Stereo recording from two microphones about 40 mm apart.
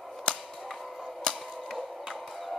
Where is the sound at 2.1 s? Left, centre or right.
Centre.